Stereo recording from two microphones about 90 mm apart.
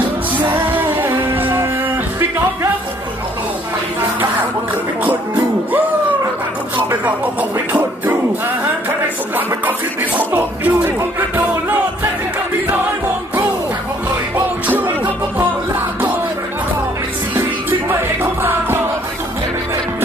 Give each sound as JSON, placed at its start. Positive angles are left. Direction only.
{"t": 1.0, "sound": "music", "side_deg": -20}
{"t": 9.3, "sound": "music", "side_deg": -20}
{"t": 17.3, "sound": "music", "side_deg": -20}